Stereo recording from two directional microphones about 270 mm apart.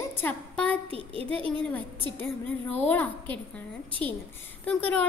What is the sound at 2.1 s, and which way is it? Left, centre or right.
A woman's voice, centre.